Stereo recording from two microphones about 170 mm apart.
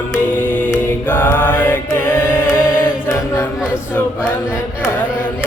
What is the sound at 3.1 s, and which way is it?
Chant, 15° left (ahead or behind).